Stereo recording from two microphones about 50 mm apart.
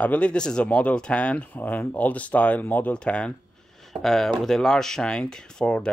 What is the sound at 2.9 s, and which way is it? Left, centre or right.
Speech, centre.